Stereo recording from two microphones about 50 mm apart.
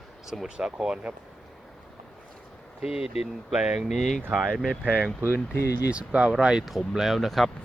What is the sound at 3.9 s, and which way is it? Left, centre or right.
Speech, centre.